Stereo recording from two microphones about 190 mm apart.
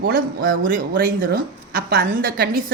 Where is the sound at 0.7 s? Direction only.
50° right (ahead or behind).